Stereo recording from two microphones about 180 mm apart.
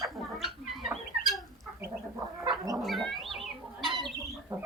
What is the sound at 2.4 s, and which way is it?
Chicken, 20° right (ahead or behind).